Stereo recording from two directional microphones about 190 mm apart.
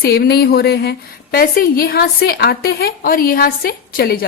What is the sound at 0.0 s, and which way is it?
A woman's voice, 55° left (ahead or behind).